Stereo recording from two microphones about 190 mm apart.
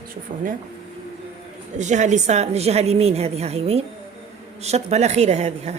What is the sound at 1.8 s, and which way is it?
Speech, 40° right (ahead or behind).